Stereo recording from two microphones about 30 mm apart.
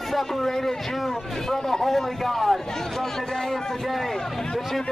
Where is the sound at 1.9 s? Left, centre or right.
Centre.